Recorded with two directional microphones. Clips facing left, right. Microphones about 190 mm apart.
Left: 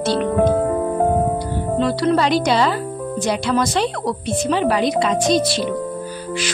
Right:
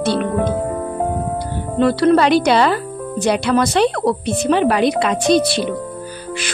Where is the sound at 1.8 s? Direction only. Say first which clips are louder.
Right 5 dB; 60° right (ahead or behind).